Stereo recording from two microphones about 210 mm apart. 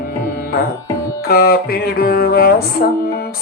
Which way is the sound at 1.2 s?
45° left (ahead or behind).